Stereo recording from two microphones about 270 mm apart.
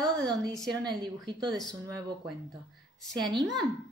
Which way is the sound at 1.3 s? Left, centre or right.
Centre.